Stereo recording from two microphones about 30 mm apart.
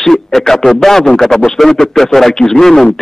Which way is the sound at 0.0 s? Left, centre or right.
Centre.